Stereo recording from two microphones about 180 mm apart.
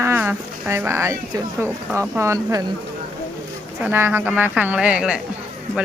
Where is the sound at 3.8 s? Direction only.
10° right (ahead or behind).